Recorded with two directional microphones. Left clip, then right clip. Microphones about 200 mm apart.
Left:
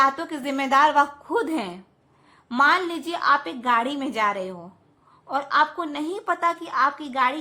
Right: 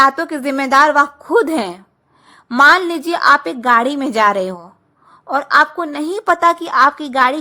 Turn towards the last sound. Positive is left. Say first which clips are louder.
# right 9 dB
turn(degrees=-40)  # may be behind; listen again after turning